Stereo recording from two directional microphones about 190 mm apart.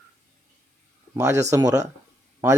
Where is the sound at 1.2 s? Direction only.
15° right (ahead or behind).